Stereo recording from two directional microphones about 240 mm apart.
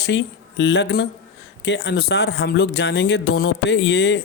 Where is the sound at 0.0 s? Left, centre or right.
Left.